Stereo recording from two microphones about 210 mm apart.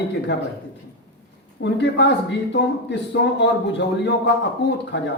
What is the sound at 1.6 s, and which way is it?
Speech, 55° left (ahead or behind).